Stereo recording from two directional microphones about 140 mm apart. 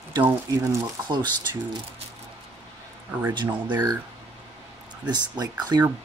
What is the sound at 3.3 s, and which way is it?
Speech, 35° right (ahead or behind).